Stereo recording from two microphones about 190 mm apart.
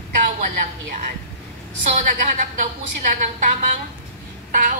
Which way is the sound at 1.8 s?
40° right (ahead or behind).